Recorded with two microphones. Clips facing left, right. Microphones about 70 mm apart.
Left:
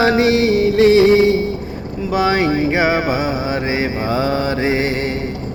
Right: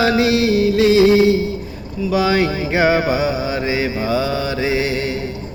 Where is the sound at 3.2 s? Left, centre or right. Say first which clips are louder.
Even; left.